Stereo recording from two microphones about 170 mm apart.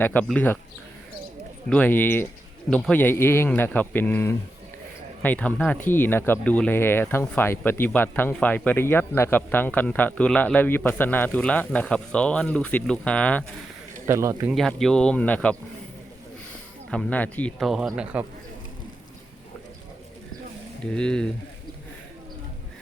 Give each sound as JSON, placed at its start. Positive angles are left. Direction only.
{"t": 0.0, "sound": "speech", "side_deg": 10}
{"t": 1.7, "sound": "speech", "side_deg": 10}
{"t": 14.1, "sound": "speech", "side_deg": -15}
{"t": 14.5, "sound": "a man's voice", "side_deg": 5}
{"t": 16.9, "sound": "a man's voice", "side_deg": 5}
{"t": 20.9, "sound": "a man's voice", "side_deg": 5}